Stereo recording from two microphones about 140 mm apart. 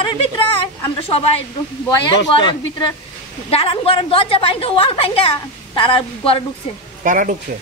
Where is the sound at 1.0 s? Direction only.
45° left (ahead or behind).